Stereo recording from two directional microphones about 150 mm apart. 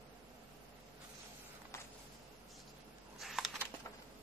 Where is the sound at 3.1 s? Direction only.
Centre (ahead or behind).